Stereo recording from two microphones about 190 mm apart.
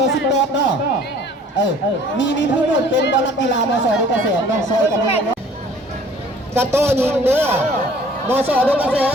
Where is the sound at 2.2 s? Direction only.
70° left (ahead or behind).